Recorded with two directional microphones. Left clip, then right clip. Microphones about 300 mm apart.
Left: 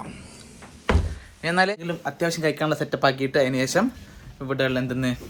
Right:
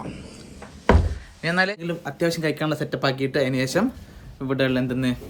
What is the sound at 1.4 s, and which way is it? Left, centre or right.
Speech, centre.